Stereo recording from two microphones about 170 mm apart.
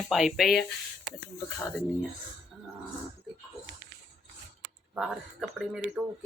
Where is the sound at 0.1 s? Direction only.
Centre (ahead or behind).